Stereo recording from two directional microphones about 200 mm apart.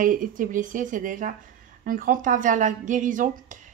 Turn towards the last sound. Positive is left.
turn(degrees=-40)  # may be behind; listen again after turning